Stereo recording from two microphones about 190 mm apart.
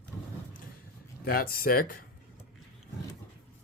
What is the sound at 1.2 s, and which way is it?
Speech, 50° left (ahead or behind).